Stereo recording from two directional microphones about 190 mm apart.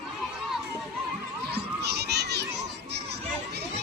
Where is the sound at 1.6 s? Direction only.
60° right (ahead or behind).